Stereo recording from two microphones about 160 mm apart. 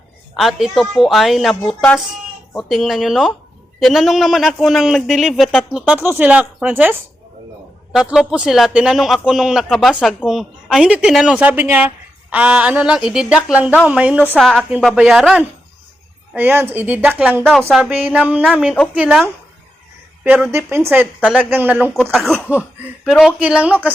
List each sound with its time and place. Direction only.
0.3 s a man's voice: centre (ahead or behind)
7.9 s a man's voice: 5° right (ahead or behind)
16.3 s a woman's voice: 15° right (ahead or behind)
22.1 s a man's voice: centre (ahead or behind)